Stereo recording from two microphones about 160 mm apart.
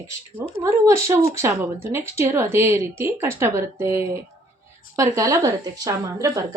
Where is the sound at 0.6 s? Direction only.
20° right (ahead or behind).